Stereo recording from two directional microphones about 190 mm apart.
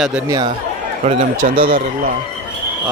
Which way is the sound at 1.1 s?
30° right (ahead or behind).